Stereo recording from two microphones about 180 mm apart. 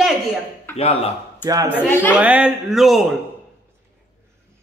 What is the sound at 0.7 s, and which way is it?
Speech, 35° left (ahead or behind).